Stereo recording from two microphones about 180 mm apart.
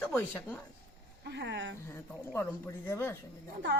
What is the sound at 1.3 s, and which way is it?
Speech, 75° right (ahead or behind).